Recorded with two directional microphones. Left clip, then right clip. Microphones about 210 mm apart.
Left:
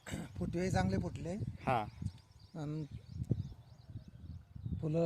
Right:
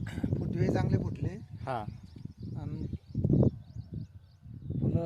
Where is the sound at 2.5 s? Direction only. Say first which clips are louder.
Left 1 dB; 55° left (ahead or behind).